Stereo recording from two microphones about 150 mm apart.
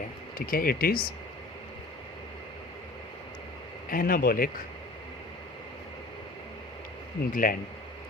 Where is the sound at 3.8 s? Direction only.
70° left (ahead or behind).